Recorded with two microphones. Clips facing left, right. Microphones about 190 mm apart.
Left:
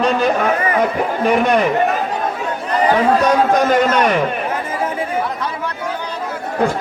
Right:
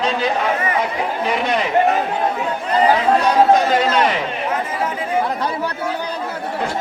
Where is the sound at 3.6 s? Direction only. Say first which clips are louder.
Left 2 dB; 45° left (ahead or behind).